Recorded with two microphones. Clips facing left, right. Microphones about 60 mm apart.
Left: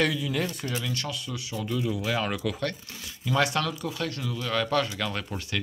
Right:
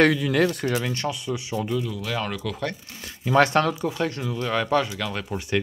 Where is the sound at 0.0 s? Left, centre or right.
Right.